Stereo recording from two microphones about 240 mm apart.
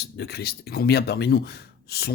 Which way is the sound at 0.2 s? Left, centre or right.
Left.